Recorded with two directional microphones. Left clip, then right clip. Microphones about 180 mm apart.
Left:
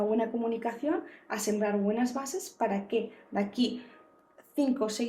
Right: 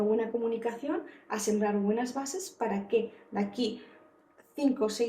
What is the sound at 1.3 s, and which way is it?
Speech, 50° left (ahead or behind).